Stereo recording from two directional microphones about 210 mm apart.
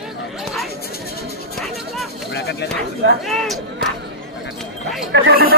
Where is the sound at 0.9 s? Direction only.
50° left (ahead or behind).